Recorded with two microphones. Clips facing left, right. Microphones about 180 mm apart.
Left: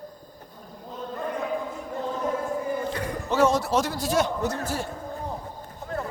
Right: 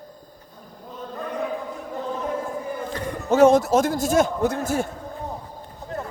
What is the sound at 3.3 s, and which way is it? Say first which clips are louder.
A man's voice: right 7 dB; 50° right (ahead or behind).